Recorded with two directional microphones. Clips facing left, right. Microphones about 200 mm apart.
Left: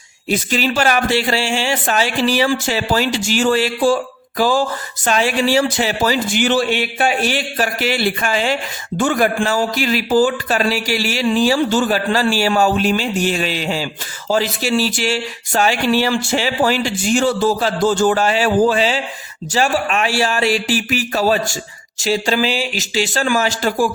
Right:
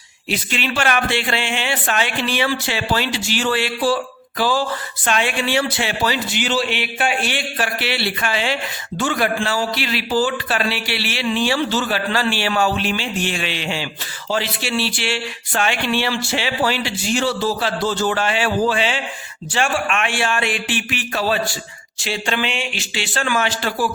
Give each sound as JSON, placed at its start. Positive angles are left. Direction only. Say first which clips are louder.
{"t": 0.3, "sound": "a man's voice", "louder": "left 5 dB", "side_deg": 40}